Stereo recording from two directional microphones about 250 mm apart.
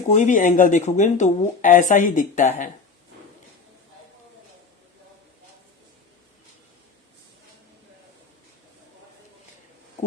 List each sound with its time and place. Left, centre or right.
0.1 s speech: left